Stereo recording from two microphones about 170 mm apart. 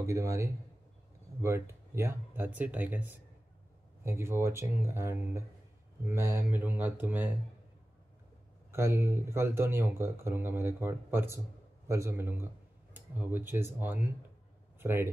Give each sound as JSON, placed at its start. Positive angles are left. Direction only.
{"t": 0.0, "sound": "speech", "side_deg": -15}
{"t": 8.7, "sound": "speech", "side_deg": -15}